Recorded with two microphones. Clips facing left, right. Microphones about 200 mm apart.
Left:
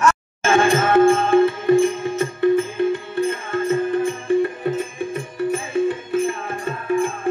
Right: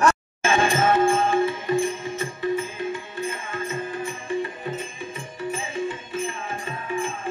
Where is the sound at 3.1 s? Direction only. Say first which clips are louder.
Left 9 dB; 65° left (ahead or behind).